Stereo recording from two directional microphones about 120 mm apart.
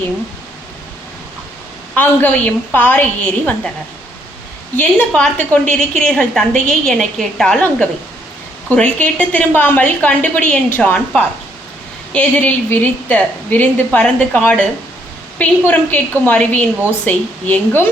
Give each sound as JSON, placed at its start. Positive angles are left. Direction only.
{"t": 2.0, "sound": "a woman's voice", "side_deg": 15}
{"t": 4.8, "sound": "a woman's voice", "side_deg": 10}